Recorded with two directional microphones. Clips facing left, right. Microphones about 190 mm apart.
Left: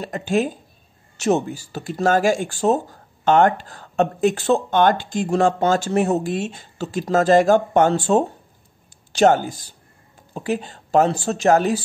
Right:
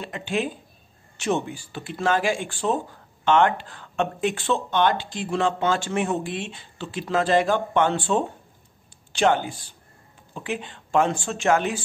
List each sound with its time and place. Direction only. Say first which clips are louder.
0.0 s speech: left 6 dB; 40° left (ahead or behind)